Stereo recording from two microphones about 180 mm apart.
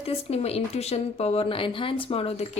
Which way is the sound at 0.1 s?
35° left (ahead or behind).